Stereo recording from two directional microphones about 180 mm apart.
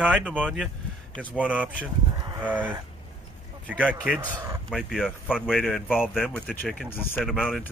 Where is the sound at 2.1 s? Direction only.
20° right (ahead or behind).